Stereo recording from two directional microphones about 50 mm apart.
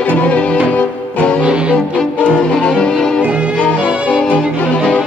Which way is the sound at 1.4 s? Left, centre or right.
Right.